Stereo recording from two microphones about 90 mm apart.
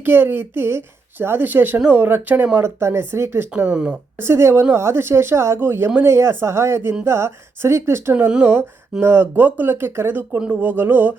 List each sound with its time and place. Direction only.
0.0 s speech: 25° right (ahead or behind)
3.7 s speech: 10° right (ahead or behind)
4.2 s speech: 30° right (ahead or behind)
8.3 s speech: 20° right (ahead or behind)